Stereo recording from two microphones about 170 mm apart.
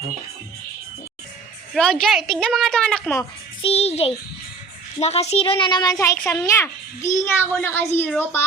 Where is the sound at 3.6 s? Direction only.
35° left (ahead or behind).